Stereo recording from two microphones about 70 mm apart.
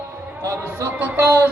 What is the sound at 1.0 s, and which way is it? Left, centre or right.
Speech, right.